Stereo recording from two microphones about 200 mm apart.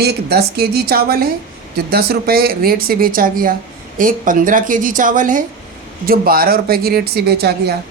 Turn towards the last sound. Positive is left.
turn(degrees=-55)  # may be behind; listen again after turning